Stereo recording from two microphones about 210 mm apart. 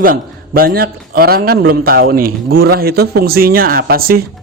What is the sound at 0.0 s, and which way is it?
A man's voice, 45° right (ahead or behind).